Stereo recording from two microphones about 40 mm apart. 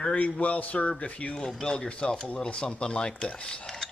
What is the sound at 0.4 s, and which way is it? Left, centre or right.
Speech, left.